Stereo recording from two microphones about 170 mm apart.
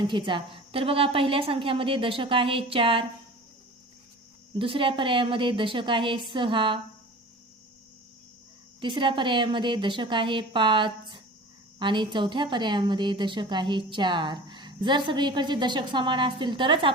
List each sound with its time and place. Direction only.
0.0 s a woman's voice: 30° right (ahead or behind)
4.5 s a woman's voice: 30° right (ahead or behind)
8.8 s a woman's voice: 30° right (ahead or behind)